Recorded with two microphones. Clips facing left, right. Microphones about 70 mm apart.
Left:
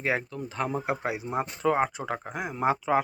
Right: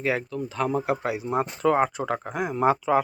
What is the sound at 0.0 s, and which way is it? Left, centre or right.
Speech, left.